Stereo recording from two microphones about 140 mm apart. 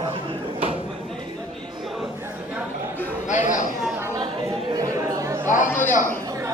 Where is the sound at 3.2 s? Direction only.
60° left (ahead or behind).